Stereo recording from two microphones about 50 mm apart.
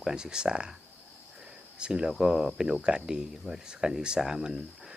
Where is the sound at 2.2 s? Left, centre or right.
Centre.